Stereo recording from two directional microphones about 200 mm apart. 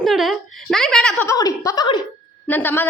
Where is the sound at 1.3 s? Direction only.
15° left (ahead or behind).